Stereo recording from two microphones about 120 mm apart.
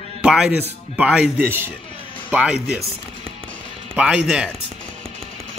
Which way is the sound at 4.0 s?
5° right (ahead or behind).